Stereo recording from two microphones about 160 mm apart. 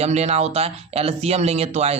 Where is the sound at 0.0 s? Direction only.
40° right (ahead or behind).